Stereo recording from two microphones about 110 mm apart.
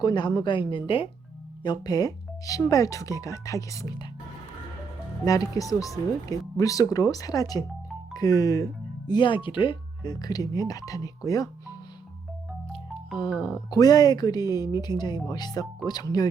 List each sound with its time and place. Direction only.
0.0 s a woman's voice: 40° left (ahead or behind)
1.6 s speech: 40° left (ahead or behind)
5.2 s speech: 35° left (ahead or behind)
13.4 s speech: 35° left (ahead or behind)